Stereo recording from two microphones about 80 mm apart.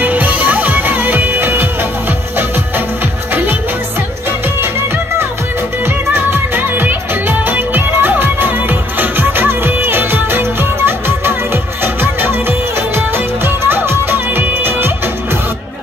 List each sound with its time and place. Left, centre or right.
0.0 s music: right
5.9 s music: right